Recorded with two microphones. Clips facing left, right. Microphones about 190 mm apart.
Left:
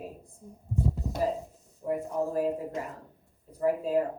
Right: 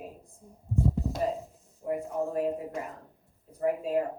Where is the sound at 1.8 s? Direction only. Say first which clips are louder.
Left 1 dB; 30° left (ahead or behind).